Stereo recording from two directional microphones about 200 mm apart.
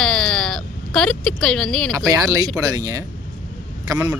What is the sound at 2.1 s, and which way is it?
Speech, 15° right (ahead or behind).